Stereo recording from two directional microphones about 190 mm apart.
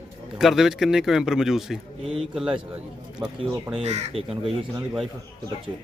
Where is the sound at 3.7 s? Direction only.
35° right (ahead or behind).